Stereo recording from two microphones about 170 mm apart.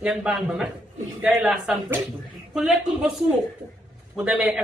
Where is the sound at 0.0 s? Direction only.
5° right (ahead or behind).